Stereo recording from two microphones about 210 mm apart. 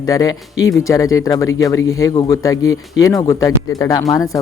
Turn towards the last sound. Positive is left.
turn(degrees=15)  # may be behind; listen again after turning